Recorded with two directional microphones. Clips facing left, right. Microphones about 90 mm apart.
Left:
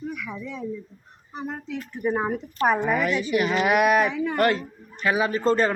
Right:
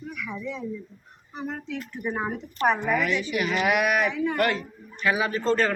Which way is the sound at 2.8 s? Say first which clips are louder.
Left 2 dB; 35° left (ahead or behind).